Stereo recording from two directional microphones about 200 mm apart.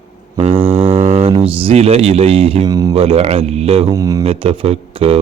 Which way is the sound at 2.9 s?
30° right (ahead or behind).